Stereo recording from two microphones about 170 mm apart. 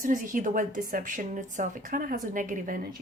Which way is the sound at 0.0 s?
50° right (ahead or behind).